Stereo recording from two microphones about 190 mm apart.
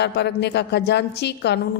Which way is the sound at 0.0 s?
65° left (ahead or behind).